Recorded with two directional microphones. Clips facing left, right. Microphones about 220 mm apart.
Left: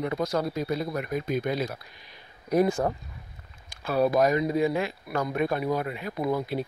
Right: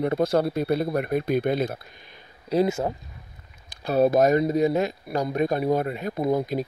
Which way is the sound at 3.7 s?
40° right (ahead or behind).